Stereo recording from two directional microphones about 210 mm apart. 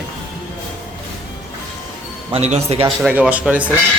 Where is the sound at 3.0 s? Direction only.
5° right (ahead or behind).